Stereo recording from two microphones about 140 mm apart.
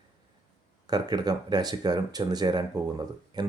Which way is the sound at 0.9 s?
30° right (ahead or behind).